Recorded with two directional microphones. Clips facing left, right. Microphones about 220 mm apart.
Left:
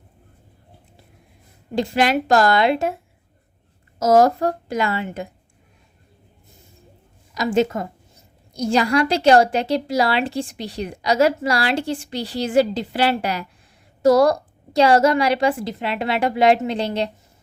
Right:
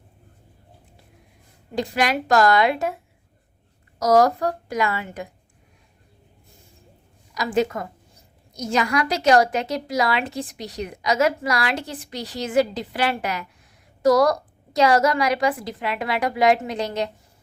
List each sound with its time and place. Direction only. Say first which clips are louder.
1.7 s a woman's voice: left 4 dB; 25° left (ahead or behind)
4.0 s a woman's voice: left 2 dB; 25° left (ahead or behind)
7.3 s a woman's voice: left 3 dB; 25° left (ahead or behind)